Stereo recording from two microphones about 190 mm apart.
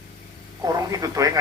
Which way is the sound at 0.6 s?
20° right (ahead or behind).